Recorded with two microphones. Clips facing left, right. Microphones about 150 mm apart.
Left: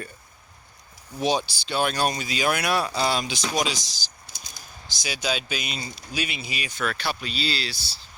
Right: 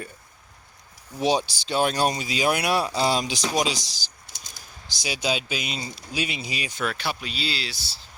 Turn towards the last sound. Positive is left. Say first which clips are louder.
# left 2 dB
turn(degrees=-20)  # may be behind; listen again after turning